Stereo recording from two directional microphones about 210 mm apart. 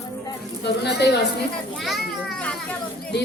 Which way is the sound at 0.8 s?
50° left (ahead or behind).